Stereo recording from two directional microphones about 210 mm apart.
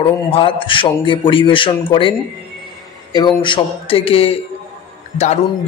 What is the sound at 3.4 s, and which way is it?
A man's voice, 25° left (ahead or behind).